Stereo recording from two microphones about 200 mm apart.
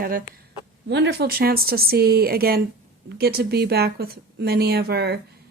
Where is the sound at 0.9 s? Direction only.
60° right (ahead or behind).